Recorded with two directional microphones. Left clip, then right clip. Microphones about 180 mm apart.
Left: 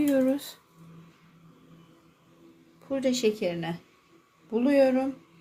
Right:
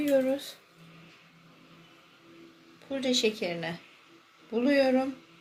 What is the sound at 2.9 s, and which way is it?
Speech, 65° left (ahead or behind).